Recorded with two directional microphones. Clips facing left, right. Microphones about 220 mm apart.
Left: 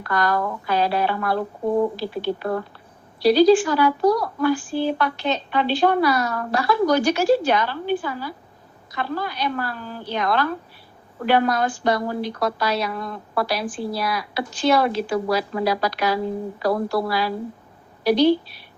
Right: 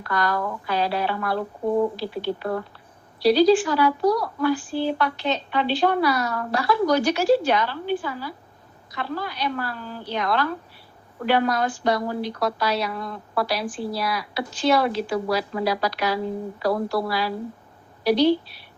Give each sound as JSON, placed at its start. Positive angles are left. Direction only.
{"t": 0.1, "sound": "a woman's voice", "side_deg": 45}